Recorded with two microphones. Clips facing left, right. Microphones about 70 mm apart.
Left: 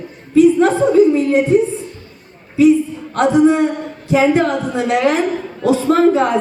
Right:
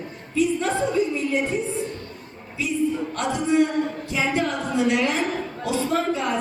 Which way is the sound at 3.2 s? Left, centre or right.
Left.